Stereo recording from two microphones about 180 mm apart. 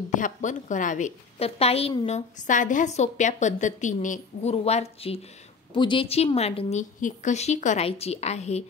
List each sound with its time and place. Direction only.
0.1 s a woman's voice: 45° left (ahead or behind)